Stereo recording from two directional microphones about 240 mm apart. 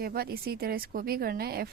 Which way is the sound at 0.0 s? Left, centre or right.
Right.